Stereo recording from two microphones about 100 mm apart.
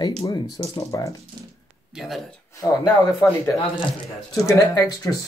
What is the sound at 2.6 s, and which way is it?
Speech, 30° left (ahead or behind).